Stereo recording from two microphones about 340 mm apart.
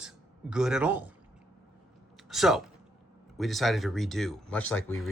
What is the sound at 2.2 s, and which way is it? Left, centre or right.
Speech, centre.